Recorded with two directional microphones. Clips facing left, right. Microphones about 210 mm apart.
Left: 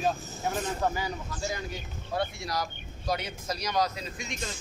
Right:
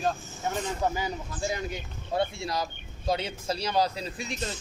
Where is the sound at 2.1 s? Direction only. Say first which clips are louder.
Right 3 dB; 25° right (ahead or behind).